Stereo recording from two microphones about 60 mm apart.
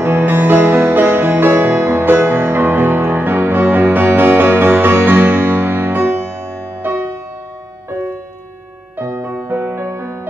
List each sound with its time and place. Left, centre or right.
0.2 s music: right
8.9 s music: right